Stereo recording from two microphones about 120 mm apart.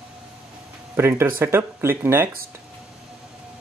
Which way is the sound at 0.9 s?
20° right (ahead or behind).